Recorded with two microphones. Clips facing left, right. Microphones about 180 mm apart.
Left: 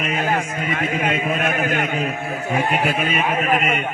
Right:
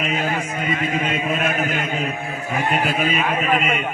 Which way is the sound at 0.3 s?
65° left (ahead or behind).